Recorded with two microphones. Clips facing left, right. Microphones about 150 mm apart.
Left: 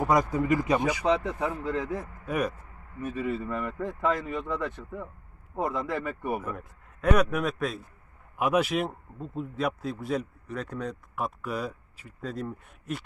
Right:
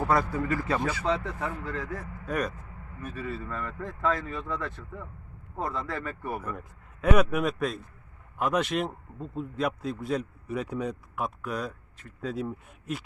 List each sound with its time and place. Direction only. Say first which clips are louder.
0.0 s speech: left 2 dB; 15° left (ahead or behind)
2.2 s speech: left 1 dB; 10° left (ahead or behind)
6.4 s a man's voice: left 1 dB; centre (ahead or behind)